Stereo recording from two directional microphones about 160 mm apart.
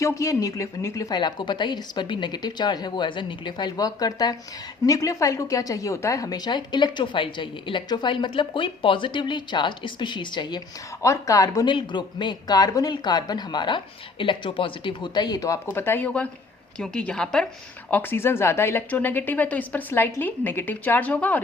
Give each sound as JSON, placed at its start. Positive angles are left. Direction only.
{"t": 0.0, "sound": "a woman's voice", "side_deg": 20}